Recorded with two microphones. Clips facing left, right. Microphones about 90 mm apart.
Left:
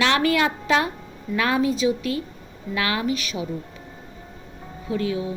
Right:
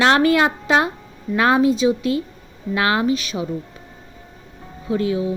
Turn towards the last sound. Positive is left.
turn(degrees=-30)  # may be behind; listen again after turning